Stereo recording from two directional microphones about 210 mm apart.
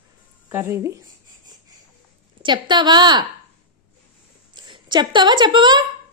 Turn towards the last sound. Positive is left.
turn(degrees=-20)  # may be behind; listen again after turning